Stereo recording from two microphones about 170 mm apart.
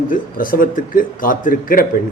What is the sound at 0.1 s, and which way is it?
A man's voice, 55° left (ahead or behind).